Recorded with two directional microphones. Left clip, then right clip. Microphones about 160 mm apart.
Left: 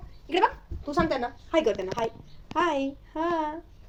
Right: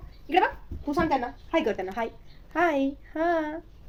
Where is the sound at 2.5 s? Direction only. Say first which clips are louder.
Right 1 dB; 35° right (ahead or behind).